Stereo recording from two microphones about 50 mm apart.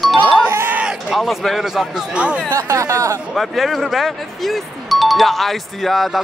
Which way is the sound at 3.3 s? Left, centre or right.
Centre.